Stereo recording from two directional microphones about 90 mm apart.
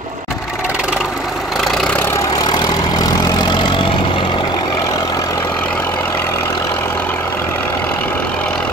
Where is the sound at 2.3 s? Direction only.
50° left (ahead or behind).